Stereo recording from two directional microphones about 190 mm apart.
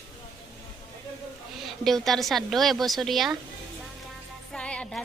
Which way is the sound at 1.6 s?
Centre (ahead or behind).